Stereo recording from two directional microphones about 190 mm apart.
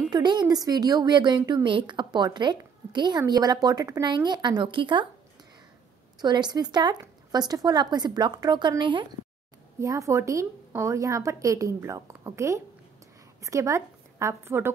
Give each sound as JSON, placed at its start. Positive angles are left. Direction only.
{"t": 0.1, "sound": "a woman's voice", "side_deg": -25}
{"t": 6.2, "sound": "a woman's voice", "side_deg": -25}